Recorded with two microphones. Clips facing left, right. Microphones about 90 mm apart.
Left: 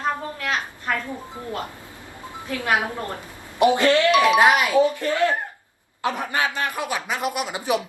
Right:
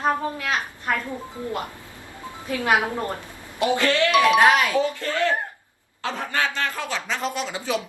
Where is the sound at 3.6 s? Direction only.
20° left (ahead or behind).